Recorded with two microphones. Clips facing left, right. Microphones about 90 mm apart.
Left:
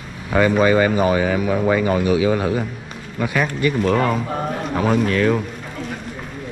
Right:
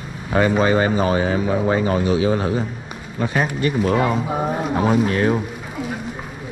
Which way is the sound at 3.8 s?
10° right (ahead or behind).